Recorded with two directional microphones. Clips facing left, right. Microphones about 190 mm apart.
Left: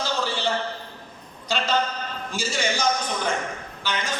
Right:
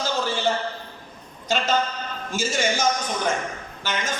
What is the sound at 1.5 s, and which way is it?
A man's voice, 45° right (ahead or behind).